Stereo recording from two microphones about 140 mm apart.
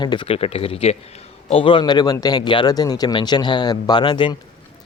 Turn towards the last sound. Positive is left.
turn(degrees=30)  # may be behind; listen again after turning